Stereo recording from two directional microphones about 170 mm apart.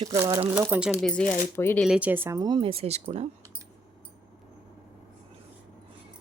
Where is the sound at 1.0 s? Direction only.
5° left (ahead or behind).